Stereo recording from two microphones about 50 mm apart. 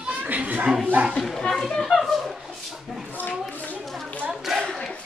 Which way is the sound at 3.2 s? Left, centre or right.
Left.